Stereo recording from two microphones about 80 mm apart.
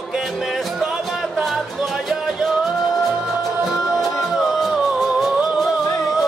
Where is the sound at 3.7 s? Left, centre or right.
Centre.